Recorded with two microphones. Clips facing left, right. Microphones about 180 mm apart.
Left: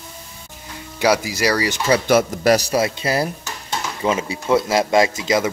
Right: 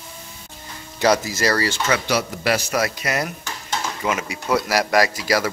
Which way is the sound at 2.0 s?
45° left (ahead or behind).